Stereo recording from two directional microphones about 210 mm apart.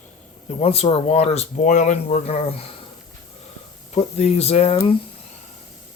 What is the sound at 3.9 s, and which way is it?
Speech, 30° left (ahead or behind).